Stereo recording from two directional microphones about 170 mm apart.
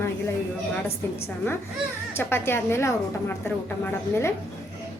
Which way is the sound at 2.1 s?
15° left (ahead or behind).